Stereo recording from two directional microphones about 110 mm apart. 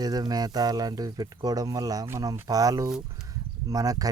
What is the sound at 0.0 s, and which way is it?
Speech, 35° right (ahead or behind).